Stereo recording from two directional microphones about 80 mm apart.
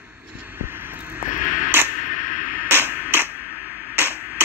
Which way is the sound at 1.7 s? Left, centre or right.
Right.